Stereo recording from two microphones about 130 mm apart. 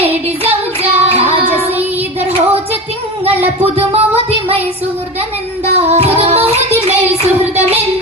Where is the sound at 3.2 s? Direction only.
50° right (ahead or behind).